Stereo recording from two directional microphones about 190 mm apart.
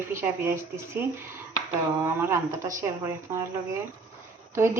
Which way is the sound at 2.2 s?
15° right (ahead or behind).